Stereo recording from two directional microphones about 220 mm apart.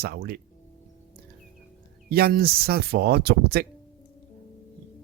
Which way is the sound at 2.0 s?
45° right (ahead or behind).